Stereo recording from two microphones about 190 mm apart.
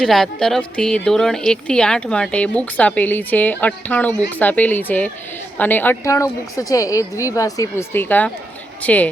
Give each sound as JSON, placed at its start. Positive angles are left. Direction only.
{"t": 0.0, "sound": "a woman's voice", "side_deg": 0}